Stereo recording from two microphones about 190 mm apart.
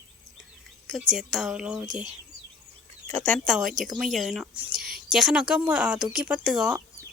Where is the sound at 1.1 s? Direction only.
Centre (ahead or behind).